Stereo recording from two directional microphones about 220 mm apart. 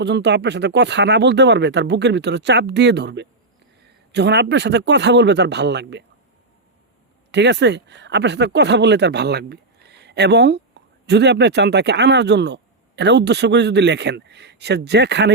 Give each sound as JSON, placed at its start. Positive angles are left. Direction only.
{"t": 0.0, "sound": "speech", "side_deg": -50}
{"t": 7.3, "sound": "speech", "side_deg": -50}